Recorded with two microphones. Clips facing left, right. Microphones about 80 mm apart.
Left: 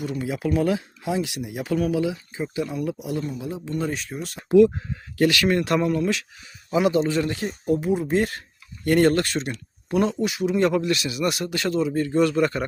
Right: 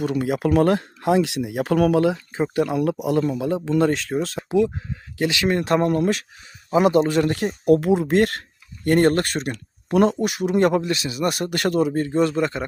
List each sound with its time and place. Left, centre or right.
0.2 s speech: right
4.4 s speech: centre
6.7 s speech: right
8.8 s speech: right
10.8 s speech: right
11.5 s speech: right
12.0 s speech: right